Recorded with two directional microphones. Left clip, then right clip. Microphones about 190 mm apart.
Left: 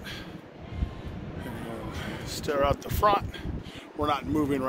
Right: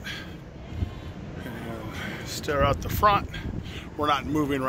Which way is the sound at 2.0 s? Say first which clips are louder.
Right 2 dB; 10° left (ahead or behind).